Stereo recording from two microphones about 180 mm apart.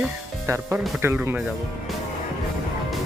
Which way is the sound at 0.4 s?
15° right (ahead or behind).